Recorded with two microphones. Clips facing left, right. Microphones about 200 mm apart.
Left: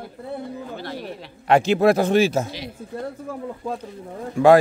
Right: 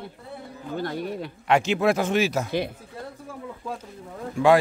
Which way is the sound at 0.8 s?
50° right (ahead or behind).